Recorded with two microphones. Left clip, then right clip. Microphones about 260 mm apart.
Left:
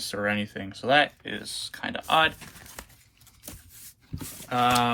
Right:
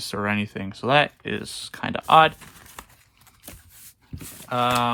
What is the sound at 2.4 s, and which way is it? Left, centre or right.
Pigeon, centre.